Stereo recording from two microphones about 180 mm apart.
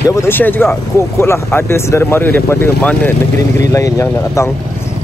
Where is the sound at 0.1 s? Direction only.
15° left (ahead or behind).